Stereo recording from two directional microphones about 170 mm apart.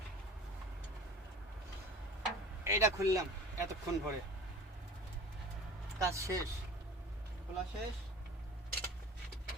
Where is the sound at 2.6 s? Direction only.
20° right (ahead or behind).